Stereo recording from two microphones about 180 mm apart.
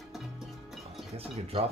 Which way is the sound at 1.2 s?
35° right (ahead or behind).